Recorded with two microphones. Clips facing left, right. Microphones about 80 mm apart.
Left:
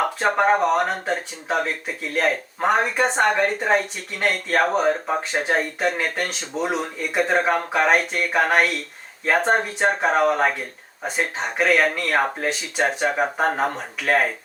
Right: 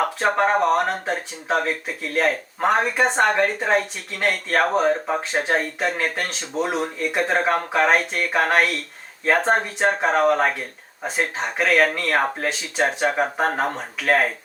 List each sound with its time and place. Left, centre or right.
0.2 s speech: centre
6.5 s speech: right
7.1 s speech: centre